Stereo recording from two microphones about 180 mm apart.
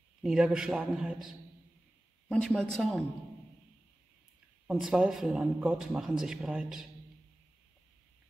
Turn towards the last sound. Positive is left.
turn(degrees=-5)  # may be behind; listen again after turning